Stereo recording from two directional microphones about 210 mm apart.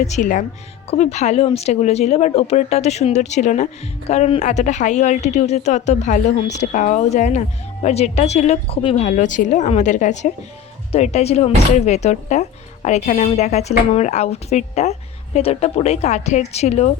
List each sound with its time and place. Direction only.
0.0 s speech: 35° left (ahead or behind)